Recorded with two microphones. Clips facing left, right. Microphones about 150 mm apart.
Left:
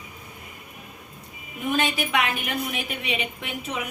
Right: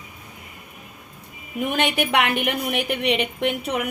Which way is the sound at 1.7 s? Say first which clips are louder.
Right 2 dB; 70° right (ahead or behind).